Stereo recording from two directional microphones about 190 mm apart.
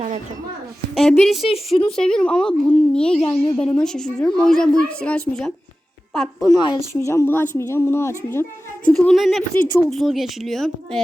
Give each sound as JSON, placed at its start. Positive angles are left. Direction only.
{"t": 0.9, "sound": "a woman's voice", "side_deg": 0}
{"t": 1.5, "sound": "speech", "side_deg": 30}
{"t": 2.0, "sound": "a woman's voice", "side_deg": 5}
{"t": 6.5, "sound": "a woman's voice", "side_deg": 20}